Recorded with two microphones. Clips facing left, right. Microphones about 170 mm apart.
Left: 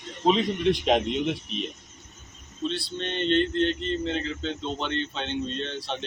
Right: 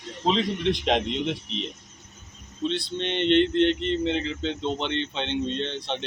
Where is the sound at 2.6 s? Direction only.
20° right (ahead or behind).